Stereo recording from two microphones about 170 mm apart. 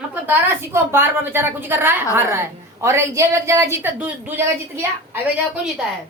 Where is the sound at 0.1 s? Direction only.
15° right (ahead or behind).